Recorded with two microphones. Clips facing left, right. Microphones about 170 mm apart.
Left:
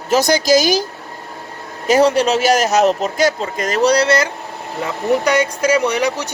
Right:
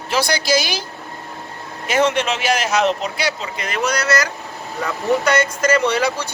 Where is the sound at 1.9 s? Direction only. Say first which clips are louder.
Left 5 dB; 35° left (ahead or behind).